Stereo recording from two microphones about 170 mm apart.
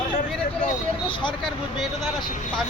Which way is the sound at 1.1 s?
30° left (ahead or behind).